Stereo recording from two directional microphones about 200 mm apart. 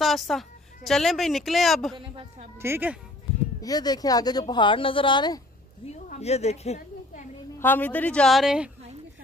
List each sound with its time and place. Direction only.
0.0 s a woman's voice: centre (ahead or behind)
2.6 s speech: 10° right (ahead or behind)
3.6 s speech: 20° left (ahead or behind)
5.9 s a sound: 35° left (ahead or behind)
7.5 s a woman's voice: 10° left (ahead or behind)